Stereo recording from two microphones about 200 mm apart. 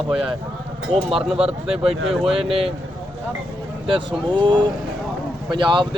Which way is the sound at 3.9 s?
25° right (ahead or behind).